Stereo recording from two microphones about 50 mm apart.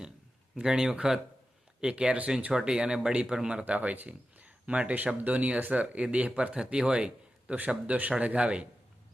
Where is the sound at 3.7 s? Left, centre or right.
Right.